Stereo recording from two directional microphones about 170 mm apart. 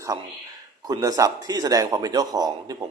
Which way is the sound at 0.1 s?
20° right (ahead or behind).